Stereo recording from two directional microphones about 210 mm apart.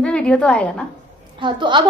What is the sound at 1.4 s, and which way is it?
Speech, 20° right (ahead or behind).